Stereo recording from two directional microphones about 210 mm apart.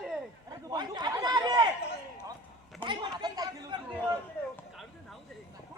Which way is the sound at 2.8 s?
20° right (ahead or behind).